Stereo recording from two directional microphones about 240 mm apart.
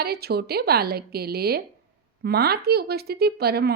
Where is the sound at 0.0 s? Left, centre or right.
Right.